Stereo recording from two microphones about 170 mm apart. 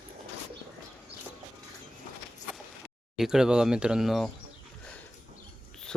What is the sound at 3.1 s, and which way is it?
Speech, centre (ahead or behind).